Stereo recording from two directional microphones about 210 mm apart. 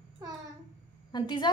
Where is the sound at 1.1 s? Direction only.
20° left (ahead or behind).